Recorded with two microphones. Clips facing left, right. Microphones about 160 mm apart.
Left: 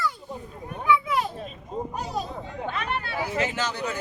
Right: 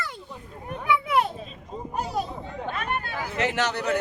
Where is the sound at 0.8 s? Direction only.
65° right (ahead or behind).